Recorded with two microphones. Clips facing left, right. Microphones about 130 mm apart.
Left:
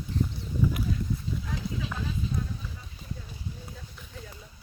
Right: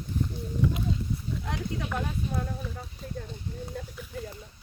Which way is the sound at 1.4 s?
70° right (ahead or behind).